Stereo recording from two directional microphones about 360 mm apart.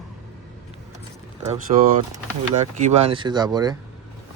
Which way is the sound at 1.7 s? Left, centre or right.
Centre.